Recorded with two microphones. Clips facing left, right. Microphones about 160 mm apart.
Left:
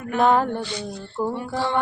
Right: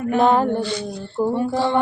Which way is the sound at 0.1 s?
30° right (ahead or behind).